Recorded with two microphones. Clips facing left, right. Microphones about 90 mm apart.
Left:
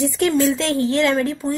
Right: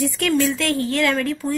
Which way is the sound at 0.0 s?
20° left (ahead or behind).